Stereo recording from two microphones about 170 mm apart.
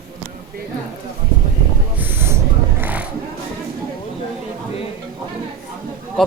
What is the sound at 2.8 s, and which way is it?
Music, 10° right (ahead or behind).